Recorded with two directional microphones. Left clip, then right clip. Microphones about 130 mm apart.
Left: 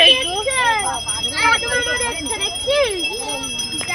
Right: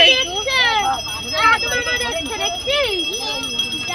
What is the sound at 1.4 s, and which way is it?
Jingle bell, 90° left.